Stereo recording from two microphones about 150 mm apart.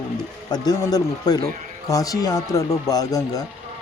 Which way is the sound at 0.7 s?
25° left (ahead or behind).